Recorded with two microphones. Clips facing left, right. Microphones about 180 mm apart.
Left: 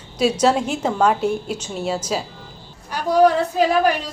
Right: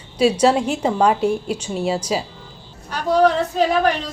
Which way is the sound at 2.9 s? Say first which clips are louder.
Left 1 dB; 10° left (ahead or behind).